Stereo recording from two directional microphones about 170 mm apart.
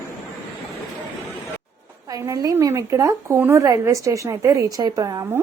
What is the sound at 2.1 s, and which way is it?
Speech, 20° right (ahead or behind).